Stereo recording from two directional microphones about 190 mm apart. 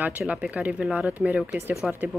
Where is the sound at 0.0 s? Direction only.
10° right (ahead or behind).